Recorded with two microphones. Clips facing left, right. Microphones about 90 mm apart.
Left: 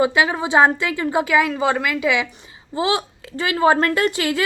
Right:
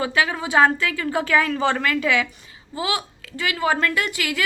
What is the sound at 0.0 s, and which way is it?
A woman's voice, 20° left (ahead or behind).